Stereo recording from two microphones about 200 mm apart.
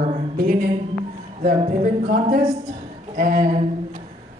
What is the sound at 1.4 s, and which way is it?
Speech, 35° right (ahead or behind).